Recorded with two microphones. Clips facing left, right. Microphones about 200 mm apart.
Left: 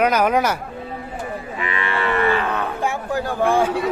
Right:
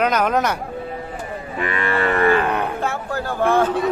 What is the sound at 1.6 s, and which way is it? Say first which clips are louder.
Cattle: right 4 dB; 45° right (ahead or behind).